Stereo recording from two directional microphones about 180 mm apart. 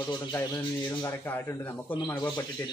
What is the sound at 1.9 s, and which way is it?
Speech, 25° left (ahead or behind).